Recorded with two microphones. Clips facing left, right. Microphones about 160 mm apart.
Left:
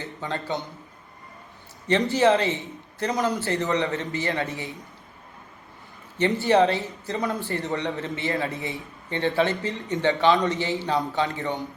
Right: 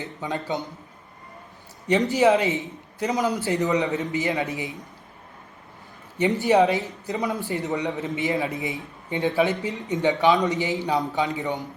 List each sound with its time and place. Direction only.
0.0 s a man's voice: 10° right (ahead or behind)
2.0 s a man's voice: 15° right (ahead or behind)
3.7 s a man's voice: centre (ahead or behind)
3.9 s a man's voice: 15° right (ahead or behind)
6.4 s a man's voice: 15° right (ahead or behind)